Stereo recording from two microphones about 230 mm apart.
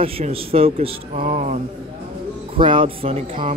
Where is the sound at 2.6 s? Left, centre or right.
Right.